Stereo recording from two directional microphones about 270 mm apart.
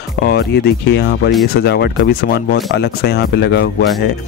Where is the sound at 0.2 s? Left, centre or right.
Left.